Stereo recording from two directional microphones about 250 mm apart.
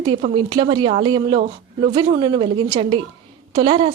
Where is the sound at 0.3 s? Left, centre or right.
Centre.